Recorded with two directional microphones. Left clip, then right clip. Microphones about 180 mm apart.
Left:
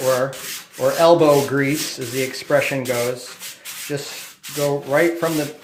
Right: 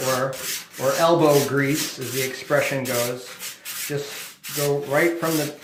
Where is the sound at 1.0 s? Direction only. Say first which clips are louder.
Left 4 dB; 45° left (ahead or behind).